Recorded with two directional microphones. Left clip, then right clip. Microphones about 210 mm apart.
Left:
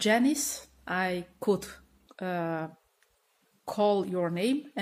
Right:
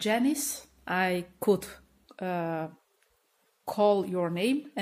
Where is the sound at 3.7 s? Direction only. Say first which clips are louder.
Right 2 dB; centre (ahead or behind).